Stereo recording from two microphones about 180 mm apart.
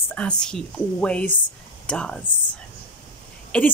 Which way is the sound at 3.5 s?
5° left (ahead or behind).